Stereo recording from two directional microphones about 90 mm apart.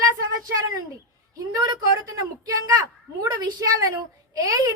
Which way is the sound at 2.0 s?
40° right (ahead or behind).